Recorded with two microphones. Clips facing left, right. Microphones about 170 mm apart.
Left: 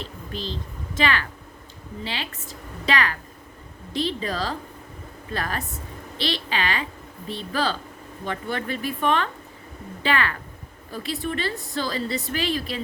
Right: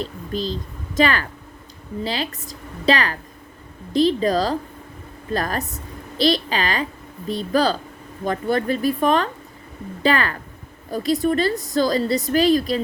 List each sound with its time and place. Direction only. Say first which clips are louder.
0.0 s a woman's voice: right 7 dB; 40° right (ahead or behind)